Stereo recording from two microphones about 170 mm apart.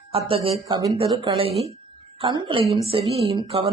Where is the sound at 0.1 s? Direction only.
35° right (ahead or behind).